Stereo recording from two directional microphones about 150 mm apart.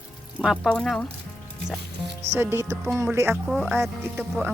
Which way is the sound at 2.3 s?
15° right (ahead or behind).